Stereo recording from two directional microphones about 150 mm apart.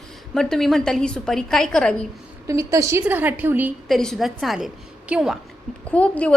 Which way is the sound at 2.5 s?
20° right (ahead or behind).